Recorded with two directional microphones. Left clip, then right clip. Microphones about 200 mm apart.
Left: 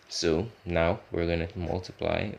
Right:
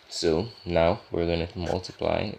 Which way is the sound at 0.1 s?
15° right (ahead or behind).